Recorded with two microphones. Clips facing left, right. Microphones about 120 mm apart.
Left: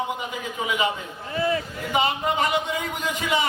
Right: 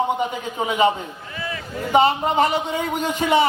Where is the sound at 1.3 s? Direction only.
35° left (ahead or behind).